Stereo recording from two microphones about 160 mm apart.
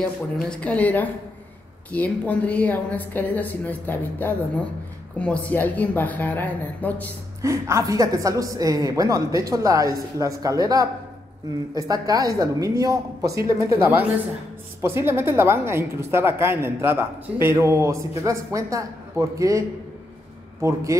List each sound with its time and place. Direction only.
0.5 s a woman's voice: 10° left (ahead or behind)
7.4 s a woman's voice: 20° right (ahead or behind)
20.6 s a woman's voice: 20° right (ahead or behind)